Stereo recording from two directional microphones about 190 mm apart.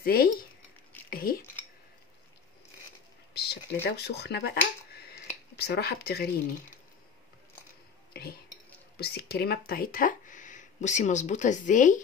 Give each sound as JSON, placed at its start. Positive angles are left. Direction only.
{"t": 0.0, "sound": "speech", "side_deg": 50}
{"t": 1.1, "sound": "cutlery", "side_deg": 50}
{"t": 3.8, "sound": "speech", "side_deg": 60}
{"t": 8.1, "sound": "speech", "side_deg": 55}